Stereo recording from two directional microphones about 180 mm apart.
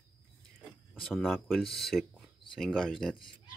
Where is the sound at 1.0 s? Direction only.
Centre (ahead or behind).